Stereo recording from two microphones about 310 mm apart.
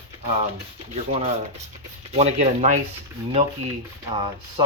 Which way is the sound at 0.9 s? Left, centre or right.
Centre.